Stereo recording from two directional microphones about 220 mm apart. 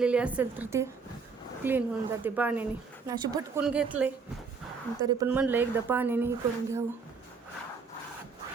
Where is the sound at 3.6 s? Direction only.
5° right (ahead or behind).